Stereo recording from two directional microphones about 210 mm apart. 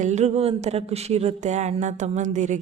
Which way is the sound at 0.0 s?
35° right (ahead or behind).